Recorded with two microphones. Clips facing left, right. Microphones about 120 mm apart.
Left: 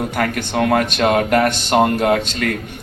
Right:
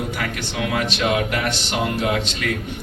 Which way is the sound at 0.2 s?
50° left (ahead or behind).